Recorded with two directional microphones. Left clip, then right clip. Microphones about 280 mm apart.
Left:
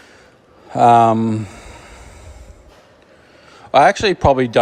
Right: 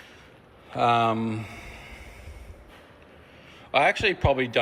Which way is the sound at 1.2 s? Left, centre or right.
Left.